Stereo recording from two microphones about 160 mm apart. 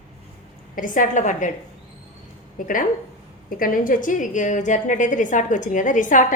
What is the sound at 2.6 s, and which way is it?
A woman's voice, 55° left (ahead or behind).